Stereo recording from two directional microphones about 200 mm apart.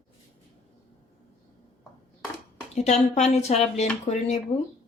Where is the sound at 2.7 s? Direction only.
35° left (ahead or behind).